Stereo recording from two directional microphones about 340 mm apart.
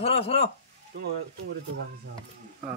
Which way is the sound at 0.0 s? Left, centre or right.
Centre.